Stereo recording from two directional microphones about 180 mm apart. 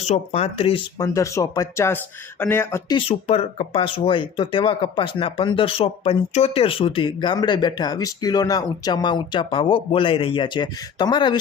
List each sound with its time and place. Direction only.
0.1 s speech: 35° left (ahead or behind); by 2.8 s 10° left (ahead or behind)
2.9 s speech: 35° left (ahead or behind)